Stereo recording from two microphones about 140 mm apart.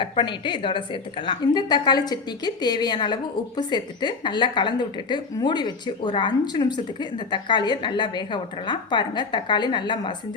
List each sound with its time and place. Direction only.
0.0 s a woman's voice: 35° left (ahead or behind)